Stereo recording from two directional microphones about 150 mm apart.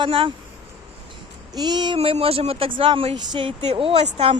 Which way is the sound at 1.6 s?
30° right (ahead or behind).